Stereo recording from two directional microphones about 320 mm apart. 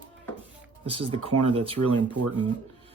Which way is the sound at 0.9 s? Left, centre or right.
Centre.